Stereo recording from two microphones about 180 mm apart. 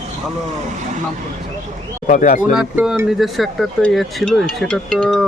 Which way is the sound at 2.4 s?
5° right (ahead or behind).